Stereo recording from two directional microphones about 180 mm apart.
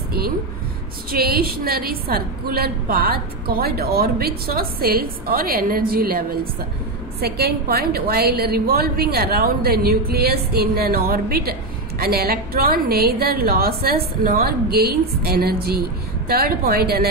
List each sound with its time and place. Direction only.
1.1 s a woman's voice: 55° right (ahead or behind)